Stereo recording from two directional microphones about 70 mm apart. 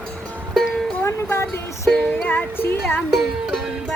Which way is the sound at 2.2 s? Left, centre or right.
Left.